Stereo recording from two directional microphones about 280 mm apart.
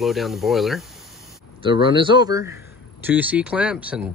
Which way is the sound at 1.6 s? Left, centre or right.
Centre.